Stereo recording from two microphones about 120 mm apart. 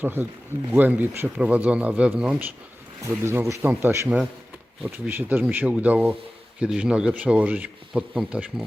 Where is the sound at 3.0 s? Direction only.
20° right (ahead or behind).